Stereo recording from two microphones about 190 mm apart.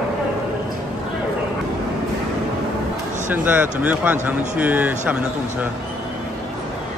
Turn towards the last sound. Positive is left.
turn(degrees=-10)  # may be behind; listen again after turning